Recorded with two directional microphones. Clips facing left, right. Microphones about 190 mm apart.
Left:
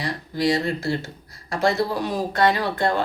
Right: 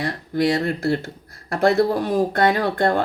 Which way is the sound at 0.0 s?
55° right (ahead or behind).